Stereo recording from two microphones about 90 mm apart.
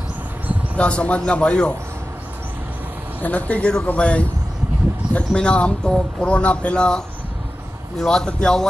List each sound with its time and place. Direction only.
0.7 s speech: 10° left (ahead or behind)
3.2 s speech: 15° left (ahead or behind)
8.0 s speech: 10° left (ahead or behind)